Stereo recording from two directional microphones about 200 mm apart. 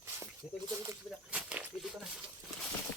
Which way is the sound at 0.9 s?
5° right (ahead or behind).